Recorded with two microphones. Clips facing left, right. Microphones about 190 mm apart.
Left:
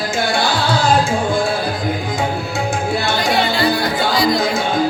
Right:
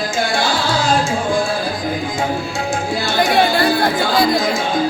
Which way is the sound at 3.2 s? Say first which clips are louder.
Right 6 dB; 55° right (ahead or behind).